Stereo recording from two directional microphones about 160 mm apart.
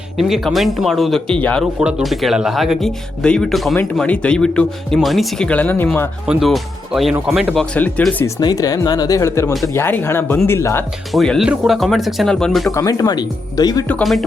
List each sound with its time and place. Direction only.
0.2 s speech: centre (ahead or behind)
1.8 s speech: 5° right (ahead or behind); by 6.1 s 10° left (ahead or behind)
6.2 s speech: centre (ahead or behind)
8.4 s speech: 25° left (ahead or behind)
11.1 s speech: centre (ahead or behind)
12.7 s speech: 20° left (ahead or behind)
13.8 s speech: 5° left (ahead or behind)